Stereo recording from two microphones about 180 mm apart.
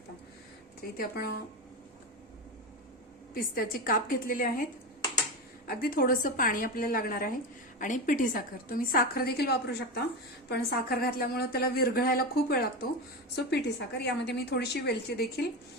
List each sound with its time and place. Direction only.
0.8 s a woman's voice: 60° left (ahead or behind)
3.3 s a woman's voice: 55° left (ahead or behind)
5.6 s a woman's voice: 55° left (ahead or behind)
13.3 s a woman's voice: 70° left (ahead or behind)